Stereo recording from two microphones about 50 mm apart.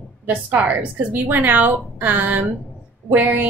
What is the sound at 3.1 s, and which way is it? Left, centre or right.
Speech, right.